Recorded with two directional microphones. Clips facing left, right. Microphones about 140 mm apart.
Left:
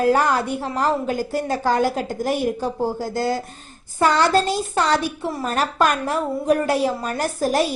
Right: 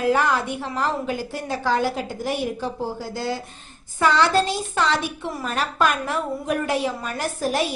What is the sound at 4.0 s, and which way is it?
A woman's voice, 45° left (ahead or behind).